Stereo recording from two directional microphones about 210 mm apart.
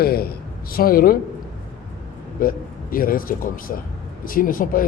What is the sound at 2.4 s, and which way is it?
Speech, 40° left (ahead or behind).